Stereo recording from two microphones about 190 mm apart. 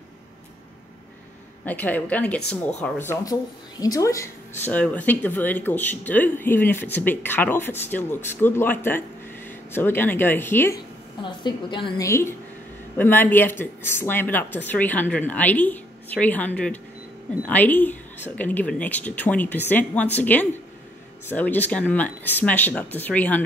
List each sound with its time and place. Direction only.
1.7 s speech: 10° left (ahead or behind)
11.2 s a woman's voice: 25° left (ahead or behind)
12.1 s a woman's voice: 15° left (ahead or behind)